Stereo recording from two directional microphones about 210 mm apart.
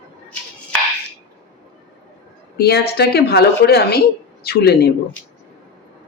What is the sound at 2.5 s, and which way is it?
Speech, 50° left (ahead or behind).